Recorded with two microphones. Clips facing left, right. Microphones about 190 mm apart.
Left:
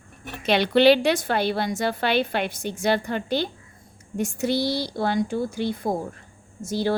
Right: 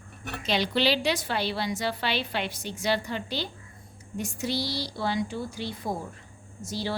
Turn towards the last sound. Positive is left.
turn(degrees=50)  # may be behind; listen again after turning